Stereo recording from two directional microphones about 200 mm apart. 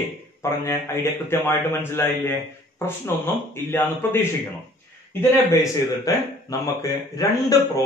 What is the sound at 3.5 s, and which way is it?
Speech, 10° left (ahead or behind).